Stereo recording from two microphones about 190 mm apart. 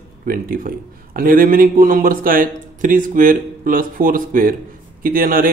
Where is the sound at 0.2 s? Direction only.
50° right (ahead or behind).